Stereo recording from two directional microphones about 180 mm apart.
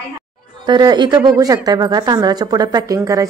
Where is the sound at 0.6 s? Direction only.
25° right (ahead or behind).